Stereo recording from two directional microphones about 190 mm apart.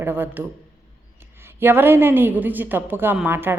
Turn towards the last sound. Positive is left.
turn(degrees=-10)  # may be behind; listen again after turning